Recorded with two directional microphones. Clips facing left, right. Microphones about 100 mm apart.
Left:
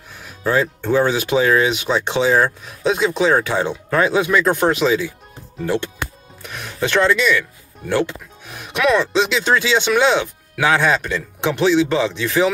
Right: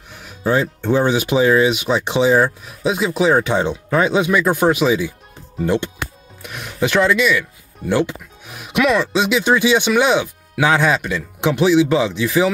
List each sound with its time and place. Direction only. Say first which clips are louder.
0.4 s speech: right 1 dB; 20° right (ahead or behind)
6.4 s speech: right 2 dB; 15° right (ahead or behind)
8.7 s speech: even; 5° right (ahead or behind)